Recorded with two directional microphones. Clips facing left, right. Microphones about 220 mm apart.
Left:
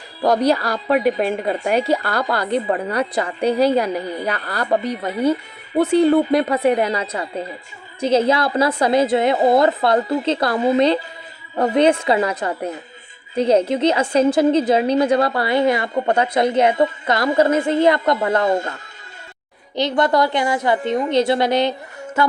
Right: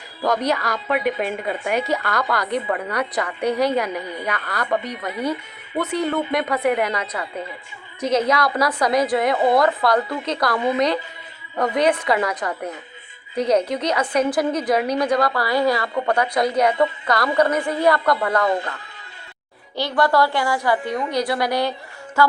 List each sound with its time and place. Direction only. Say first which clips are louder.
0.2 s a woman's voice: left 5 dB; 35° left (ahead or behind)
19.7 s a woman's voice: left 2 dB; 20° left (ahead or behind)